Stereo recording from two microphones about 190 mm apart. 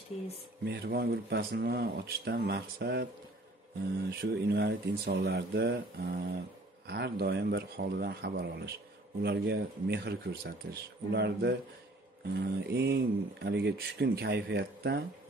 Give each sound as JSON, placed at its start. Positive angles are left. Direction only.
{"t": 0.7, "sound": "speech", "side_deg": -55}
{"t": 4.1, "sound": "speech", "side_deg": -60}
{"t": 12.6, "sound": "speech", "side_deg": -60}